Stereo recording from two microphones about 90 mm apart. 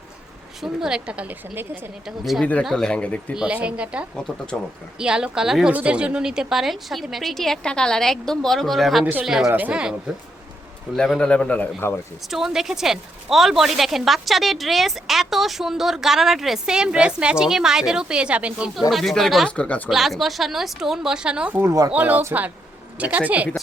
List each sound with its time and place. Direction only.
0.6 s a woman's voice: 5° right (ahead or behind)
2.0 s a woman's voice: centre (ahead or behind)
2.4 s speech: 15° left (ahead or behind)
3.3 s a woman's voice: 10° right (ahead or behind)
4.1 s speech: 10° left (ahead or behind)
4.9 s a woman's voice: 10° right (ahead or behind)
9.5 s a woman's voice: 15° right (ahead or behind)
11.2 s speech: 15° left (ahead or behind)
12.3 s a woman's voice: 5° right (ahead or behind)
18.9 s a woman's voice: centre (ahead or behind)
19.5 s speech: 15° left (ahead or behind)
19.9 s a woman's voice: centre (ahead or behind); by 23.5 s 15° right (ahead or behind)